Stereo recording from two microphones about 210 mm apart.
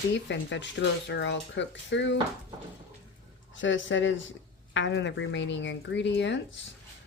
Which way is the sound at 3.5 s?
65° left (ahead or behind).